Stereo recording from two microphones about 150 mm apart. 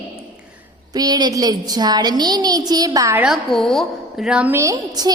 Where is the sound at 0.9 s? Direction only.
25° right (ahead or behind).